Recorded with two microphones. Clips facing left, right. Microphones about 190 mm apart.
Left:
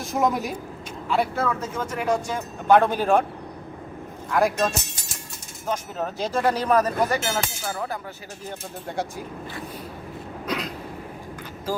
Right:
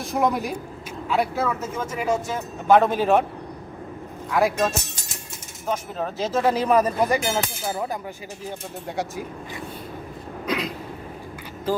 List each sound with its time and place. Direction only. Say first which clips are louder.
0.0 s speech: right 1 dB; centre (ahead or behind)
4.3 s speech: right 1 dB; centre (ahead or behind); by 7.9 s 20° right (ahead or behind)